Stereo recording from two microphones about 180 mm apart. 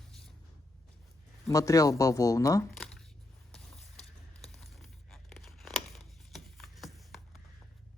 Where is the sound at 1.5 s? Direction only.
20° left (ahead or behind).